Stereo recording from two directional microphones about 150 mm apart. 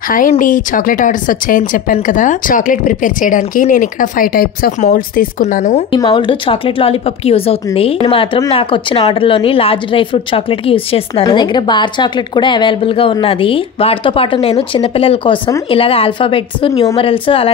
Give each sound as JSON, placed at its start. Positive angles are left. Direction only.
{"t": 0.1, "sound": "speech", "side_deg": 65}
{"t": 5.4, "sound": "speech", "side_deg": 50}
{"t": 5.9, "sound": "a woman's voice", "side_deg": 30}